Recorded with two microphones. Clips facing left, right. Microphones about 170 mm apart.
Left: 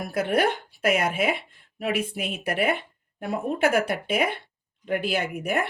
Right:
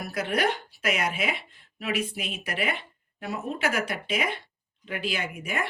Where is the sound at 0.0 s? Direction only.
55° left (ahead or behind).